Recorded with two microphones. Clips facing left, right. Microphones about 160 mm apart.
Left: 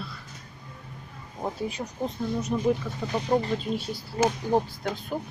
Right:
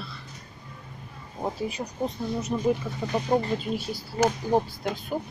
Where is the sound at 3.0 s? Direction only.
15° right (ahead or behind).